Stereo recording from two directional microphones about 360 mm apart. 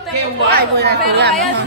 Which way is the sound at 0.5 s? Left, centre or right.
Right.